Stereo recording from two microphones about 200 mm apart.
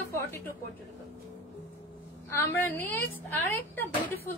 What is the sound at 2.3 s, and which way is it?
A woman's voice, 10° left (ahead or behind).